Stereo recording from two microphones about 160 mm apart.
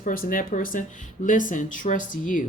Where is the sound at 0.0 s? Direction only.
60° left (ahead or behind).